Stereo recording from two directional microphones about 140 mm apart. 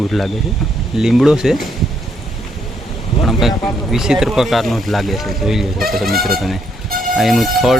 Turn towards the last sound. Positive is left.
turn(degrees=0)  # may be behind; listen again after turning